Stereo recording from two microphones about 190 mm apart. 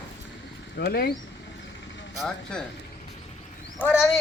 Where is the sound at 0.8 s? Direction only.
55° left (ahead or behind).